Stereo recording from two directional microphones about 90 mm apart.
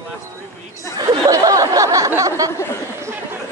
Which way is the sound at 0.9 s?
45° right (ahead or behind).